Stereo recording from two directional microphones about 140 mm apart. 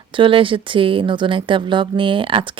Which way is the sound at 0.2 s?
40° right (ahead or behind).